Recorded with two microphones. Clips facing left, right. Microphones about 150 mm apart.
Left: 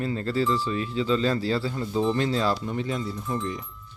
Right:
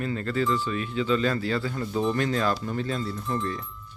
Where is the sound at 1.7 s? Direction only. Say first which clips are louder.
Left 1 dB; 15° left (ahead or behind).